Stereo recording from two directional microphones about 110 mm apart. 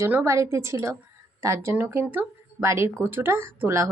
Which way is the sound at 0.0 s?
25° right (ahead or behind).